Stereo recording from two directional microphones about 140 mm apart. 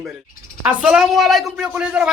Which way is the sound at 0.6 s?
10° right (ahead or behind).